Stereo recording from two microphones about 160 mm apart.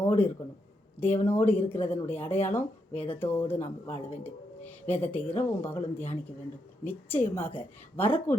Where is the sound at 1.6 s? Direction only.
40° left (ahead or behind).